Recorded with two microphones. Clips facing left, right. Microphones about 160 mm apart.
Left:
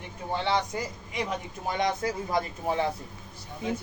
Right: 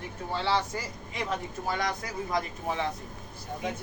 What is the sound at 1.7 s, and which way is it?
Speech, 25° left (ahead or behind).